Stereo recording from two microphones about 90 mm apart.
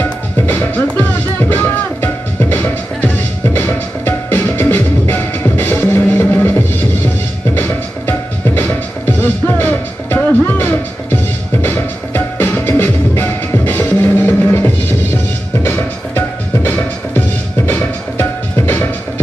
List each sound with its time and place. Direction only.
0.0 s music: 20° left (ahead or behind)
15.7 s music: 20° left (ahead or behind)